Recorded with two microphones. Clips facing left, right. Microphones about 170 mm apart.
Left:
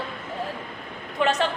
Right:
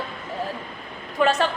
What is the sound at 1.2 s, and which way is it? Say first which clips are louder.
Speech: right 3 dB; 20° left (ahead or behind).